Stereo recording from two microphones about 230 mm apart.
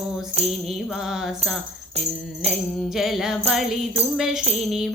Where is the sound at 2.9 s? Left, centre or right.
Centre.